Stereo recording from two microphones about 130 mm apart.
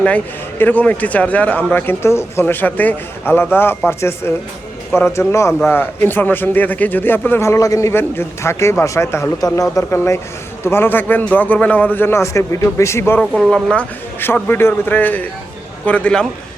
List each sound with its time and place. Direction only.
0.6 s a man's voice: 10° left (ahead or behind)
13.5 s speech: 5° left (ahead or behind)